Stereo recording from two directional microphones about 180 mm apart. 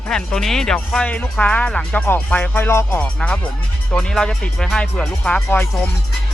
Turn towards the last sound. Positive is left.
turn(degrees=5)  # may be behind; listen again after turning